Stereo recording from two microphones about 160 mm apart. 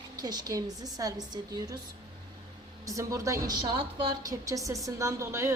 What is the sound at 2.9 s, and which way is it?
A woman's voice, 20° right (ahead or behind).